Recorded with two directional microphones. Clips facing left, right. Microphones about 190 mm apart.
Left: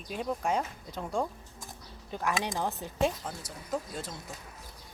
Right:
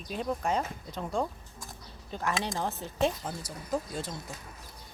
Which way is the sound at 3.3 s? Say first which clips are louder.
Right 2 dB; centre (ahead or behind).